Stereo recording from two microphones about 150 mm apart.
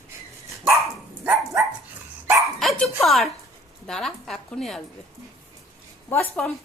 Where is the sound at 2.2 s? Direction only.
20° right (ahead or behind).